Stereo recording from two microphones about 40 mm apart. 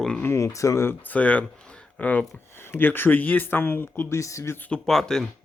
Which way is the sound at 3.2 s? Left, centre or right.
Left.